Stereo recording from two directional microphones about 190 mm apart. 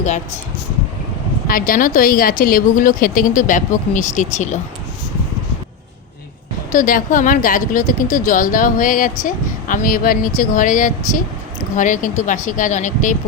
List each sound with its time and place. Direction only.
1.5 s a woman's voice: 45° left (ahead or behind)
6.7 s a woman's voice: 45° left (ahead or behind)